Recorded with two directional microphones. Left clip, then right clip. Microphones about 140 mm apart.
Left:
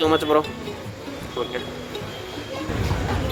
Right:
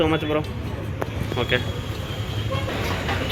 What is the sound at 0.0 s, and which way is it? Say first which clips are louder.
Speech: left 3 dB; 45° left (ahead or behind).